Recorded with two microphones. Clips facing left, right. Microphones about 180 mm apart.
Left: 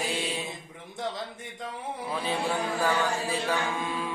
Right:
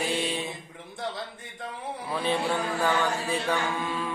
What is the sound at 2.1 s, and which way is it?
A man's voice, 5° left (ahead or behind).